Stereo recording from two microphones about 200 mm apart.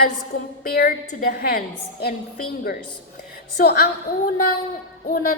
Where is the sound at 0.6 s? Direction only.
50° left (ahead or behind).